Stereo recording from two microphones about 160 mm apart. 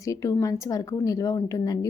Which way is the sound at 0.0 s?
20° left (ahead or behind).